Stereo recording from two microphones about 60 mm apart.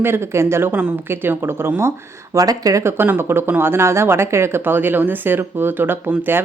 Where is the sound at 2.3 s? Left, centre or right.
Right.